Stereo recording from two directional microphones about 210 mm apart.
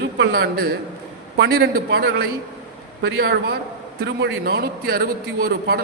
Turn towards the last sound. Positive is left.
turn(degrees=-45)  # may be behind; listen again after turning